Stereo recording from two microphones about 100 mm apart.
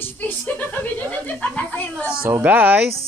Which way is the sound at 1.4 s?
15° left (ahead or behind).